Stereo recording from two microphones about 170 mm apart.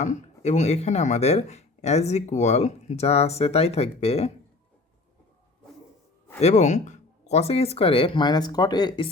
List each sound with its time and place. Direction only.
0.0 s speech: 45° left (ahead or behind)
6.4 s speech: 40° left (ahead or behind); by 9.0 s 25° left (ahead or behind)